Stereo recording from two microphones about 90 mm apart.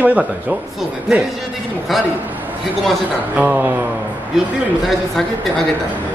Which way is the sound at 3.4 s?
20° right (ahead or behind).